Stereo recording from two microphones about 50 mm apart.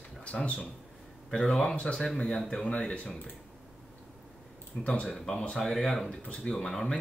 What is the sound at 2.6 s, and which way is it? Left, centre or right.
Speech, left.